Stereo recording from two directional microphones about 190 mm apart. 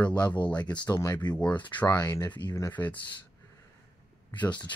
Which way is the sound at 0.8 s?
20° left (ahead or behind).